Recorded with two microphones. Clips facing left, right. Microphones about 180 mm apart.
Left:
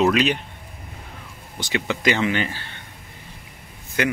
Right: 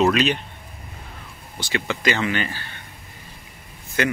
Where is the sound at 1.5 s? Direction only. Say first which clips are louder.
Left 1 dB; 15° left (ahead or behind).